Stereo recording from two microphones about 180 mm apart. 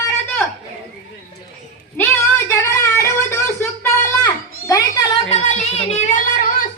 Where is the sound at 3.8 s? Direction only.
15° left (ahead or behind).